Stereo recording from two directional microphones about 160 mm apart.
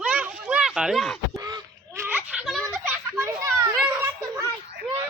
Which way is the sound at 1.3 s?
20° right (ahead or behind).